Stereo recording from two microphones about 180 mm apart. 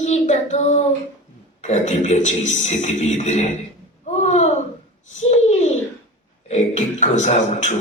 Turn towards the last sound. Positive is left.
turn(degrees=40)  # may be behind; listen again after turning